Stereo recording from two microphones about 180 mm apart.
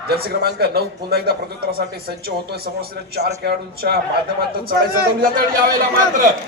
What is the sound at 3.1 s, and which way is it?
Speech, 65° right (ahead or behind).